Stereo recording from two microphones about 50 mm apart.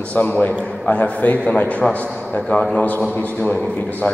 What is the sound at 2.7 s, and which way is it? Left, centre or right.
Speech, left.